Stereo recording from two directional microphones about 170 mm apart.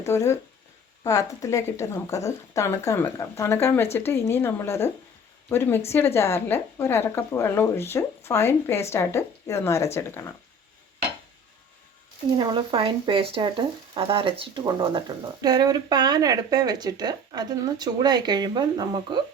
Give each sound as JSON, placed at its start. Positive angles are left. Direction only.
{"t": 0.0, "sound": "speech", "side_deg": 15}
{"t": 12.4, "sound": "speech", "side_deg": -25}